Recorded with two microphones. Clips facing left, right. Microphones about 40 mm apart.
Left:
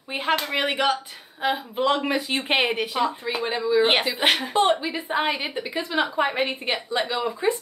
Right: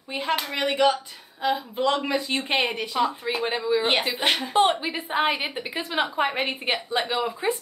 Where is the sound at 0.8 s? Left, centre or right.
Left.